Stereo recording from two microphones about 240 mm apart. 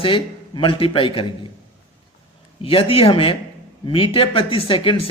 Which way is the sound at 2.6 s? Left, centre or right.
Left.